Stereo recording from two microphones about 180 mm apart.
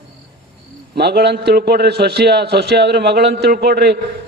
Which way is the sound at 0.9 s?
65° right (ahead or behind).